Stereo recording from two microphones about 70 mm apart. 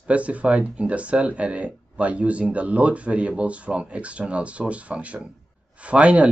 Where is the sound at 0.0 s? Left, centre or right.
Centre.